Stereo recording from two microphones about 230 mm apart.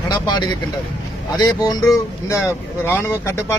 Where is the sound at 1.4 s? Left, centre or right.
Centre.